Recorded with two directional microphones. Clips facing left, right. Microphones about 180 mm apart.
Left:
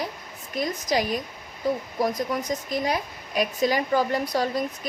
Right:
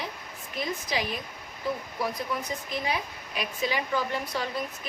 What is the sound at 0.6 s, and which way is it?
Speech, 40° left (ahead or behind).